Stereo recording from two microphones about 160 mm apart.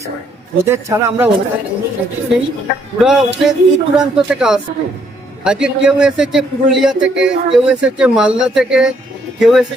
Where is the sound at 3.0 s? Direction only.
5° right (ahead or behind).